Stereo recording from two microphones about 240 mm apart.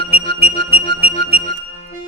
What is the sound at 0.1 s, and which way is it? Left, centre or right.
Music, right.